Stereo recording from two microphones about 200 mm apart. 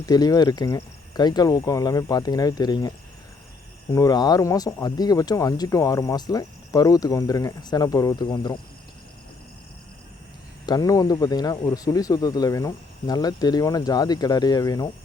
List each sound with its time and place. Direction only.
0.0 s speech: 20° left (ahead or behind)
3.9 s speech: 20° left (ahead or behind)
10.7 s speech: 20° left (ahead or behind)